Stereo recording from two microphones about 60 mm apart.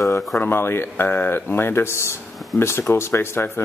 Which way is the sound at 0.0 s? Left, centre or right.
Left.